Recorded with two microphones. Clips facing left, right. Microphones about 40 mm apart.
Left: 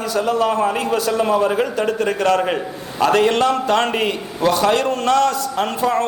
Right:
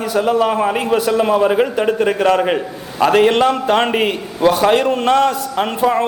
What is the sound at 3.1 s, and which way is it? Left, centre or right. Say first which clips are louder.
A man's voice: right 3 dB; right.